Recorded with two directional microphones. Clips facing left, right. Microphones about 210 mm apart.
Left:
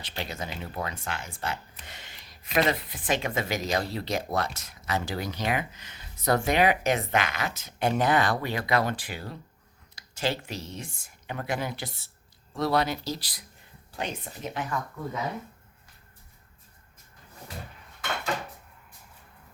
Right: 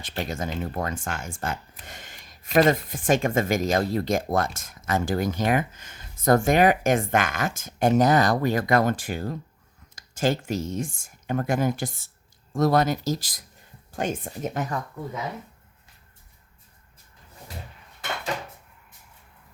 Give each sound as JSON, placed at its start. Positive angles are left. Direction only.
{"t": 0.0, "sound": "speech", "side_deg": -50}